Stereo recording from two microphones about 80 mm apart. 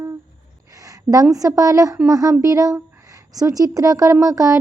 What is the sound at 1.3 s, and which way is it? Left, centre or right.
Speech, right.